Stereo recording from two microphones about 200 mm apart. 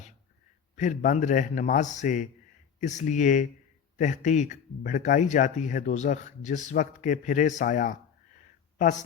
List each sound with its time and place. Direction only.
0.8 s speech: 40° left (ahead or behind)